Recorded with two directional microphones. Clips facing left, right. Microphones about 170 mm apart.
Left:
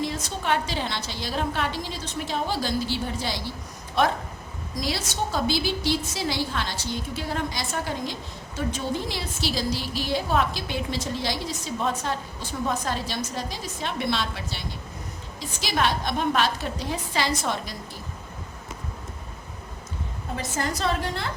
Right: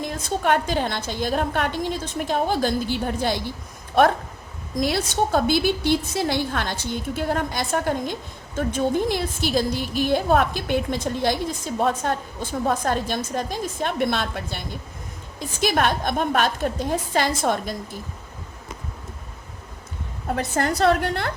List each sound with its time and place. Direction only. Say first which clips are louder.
0.0 s a woman's voice: right 4 dB; 50° right (ahead or behind)
20.3 s a woman's voice: right 6 dB; 60° right (ahead or behind)